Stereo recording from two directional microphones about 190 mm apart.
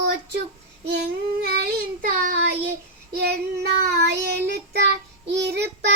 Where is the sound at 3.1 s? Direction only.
55° right (ahead or behind).